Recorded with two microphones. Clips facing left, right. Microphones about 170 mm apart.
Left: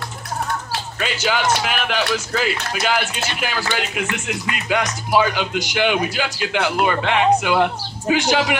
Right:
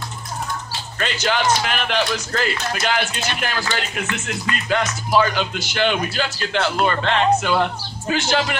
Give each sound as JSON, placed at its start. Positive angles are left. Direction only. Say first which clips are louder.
{"t": 0.9, "sound": "speech", "louder": "right 1 dB", "side_deg": 5}